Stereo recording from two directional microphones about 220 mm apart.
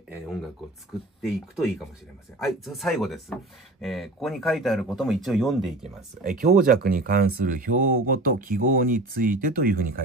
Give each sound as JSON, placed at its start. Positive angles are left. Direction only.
{"t": 0.1, "sound": "speech", "side_deg": 0}
{"t": 2.4, "sound": "speech", "side_deg": 0}
{"t": 6.2, "sound": "speech", "side_deg": -35}